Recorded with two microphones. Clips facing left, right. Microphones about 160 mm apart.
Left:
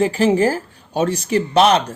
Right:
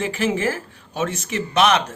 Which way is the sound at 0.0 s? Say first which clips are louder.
Left 7 dB; 35° left (ahead or behind).